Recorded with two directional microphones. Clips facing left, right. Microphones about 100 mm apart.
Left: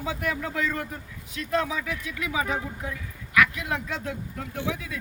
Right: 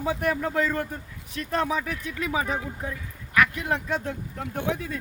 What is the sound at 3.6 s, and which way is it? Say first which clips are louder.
Speech: right 3 dB; 40° right (ahead or behind).